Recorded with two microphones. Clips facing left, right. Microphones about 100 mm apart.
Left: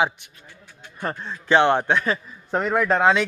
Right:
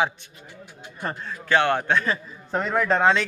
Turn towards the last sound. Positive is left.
turn(degrees=10)  # may be behind; listen again after turning